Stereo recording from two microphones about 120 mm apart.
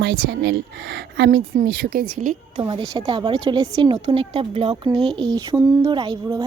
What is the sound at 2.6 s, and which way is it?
A woman's voice, 45° right (ahead or behind).